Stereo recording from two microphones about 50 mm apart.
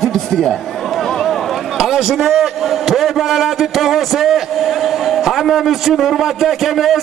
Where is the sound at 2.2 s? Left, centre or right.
Centre.